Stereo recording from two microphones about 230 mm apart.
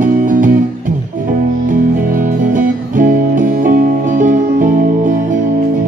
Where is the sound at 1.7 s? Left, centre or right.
Right.